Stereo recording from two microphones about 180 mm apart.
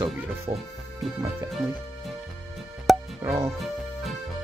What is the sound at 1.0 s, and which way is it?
Speech, centre (ahead or behind).